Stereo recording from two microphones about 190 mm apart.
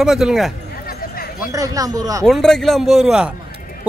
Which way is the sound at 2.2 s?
Centre (ahead or behind).